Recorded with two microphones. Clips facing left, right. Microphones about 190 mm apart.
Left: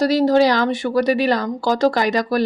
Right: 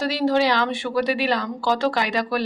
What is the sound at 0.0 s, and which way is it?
A woman's voice, 40° left (ahead or behind).